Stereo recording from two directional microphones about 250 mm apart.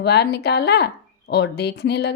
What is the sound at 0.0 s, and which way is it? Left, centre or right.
A woman's voice, left.